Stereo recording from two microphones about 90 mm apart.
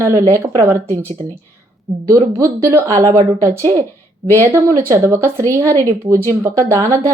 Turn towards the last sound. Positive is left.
turn(degrees=-35)  # may be behind; listen again after turning